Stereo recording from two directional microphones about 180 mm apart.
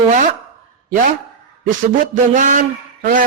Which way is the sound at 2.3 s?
45° right (ahead or behind).